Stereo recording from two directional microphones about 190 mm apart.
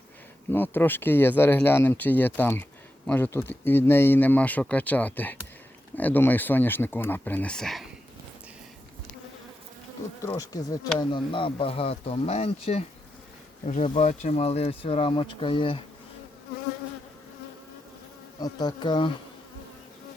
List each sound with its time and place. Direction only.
0.5 s speech: 10° left (ahead or behind)
10.2 s speech: 15° left (ahead or behind)
18.3 s speech: 20° left (ahead or behind)